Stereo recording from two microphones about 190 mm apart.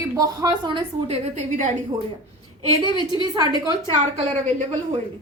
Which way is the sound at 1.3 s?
40° right (ahead or behind).